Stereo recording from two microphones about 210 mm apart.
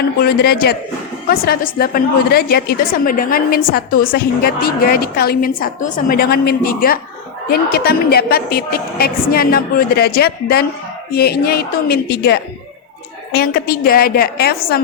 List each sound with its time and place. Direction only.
0.2 s a woman's voice: 45° left (ahead or behind)